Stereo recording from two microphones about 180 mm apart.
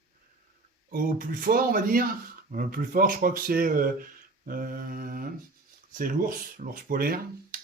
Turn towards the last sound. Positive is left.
turn(degrees=-55)  # may be behind; listen again after turning